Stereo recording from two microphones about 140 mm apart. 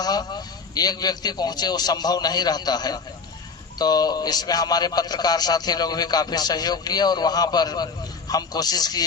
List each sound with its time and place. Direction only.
0.0 s a man's voice: 30° left (ahead or behind)